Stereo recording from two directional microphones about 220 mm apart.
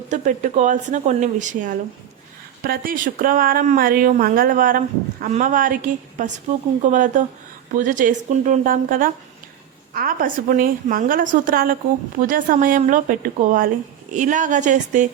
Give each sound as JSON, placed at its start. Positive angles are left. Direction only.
{"t": 0.1, "sound": "speech", "side_deg": -35}